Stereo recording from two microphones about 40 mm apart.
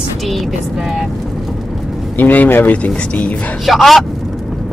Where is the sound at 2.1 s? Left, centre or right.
Left.